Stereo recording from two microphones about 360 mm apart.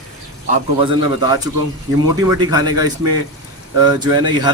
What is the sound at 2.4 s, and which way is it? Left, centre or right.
Speech, centre.